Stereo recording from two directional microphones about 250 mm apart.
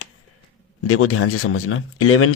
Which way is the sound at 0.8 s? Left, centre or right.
Left.